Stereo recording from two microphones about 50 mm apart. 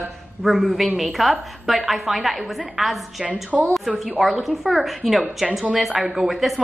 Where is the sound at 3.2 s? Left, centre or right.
Right.